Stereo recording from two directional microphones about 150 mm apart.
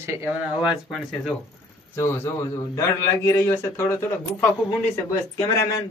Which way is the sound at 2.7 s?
20° left (ahead or behind).